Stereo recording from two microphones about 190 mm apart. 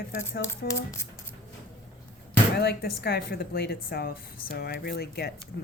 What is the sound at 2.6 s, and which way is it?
Speech, 60° left (ahead or behind).